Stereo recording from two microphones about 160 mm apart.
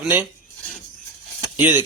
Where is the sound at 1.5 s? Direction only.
15° right (ahead or behind).